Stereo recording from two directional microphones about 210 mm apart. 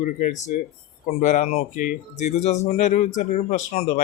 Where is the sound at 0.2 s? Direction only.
35° left (ahead or behind).